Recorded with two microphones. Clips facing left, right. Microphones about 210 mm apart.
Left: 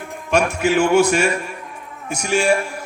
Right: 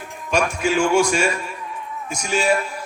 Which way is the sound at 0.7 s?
60° left (ahead or behind).